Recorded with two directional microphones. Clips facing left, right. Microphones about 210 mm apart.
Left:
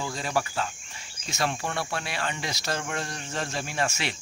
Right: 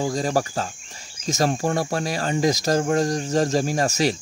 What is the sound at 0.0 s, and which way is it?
Speech, 40° right (ahead or behind).